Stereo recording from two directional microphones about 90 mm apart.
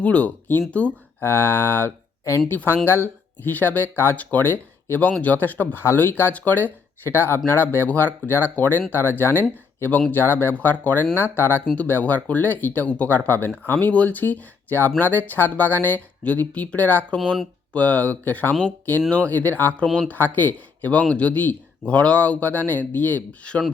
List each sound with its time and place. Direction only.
0.0 s speech: 15° left (ahead or behind)